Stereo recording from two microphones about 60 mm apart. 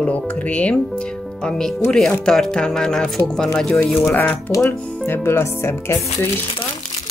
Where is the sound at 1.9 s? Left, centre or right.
Centre.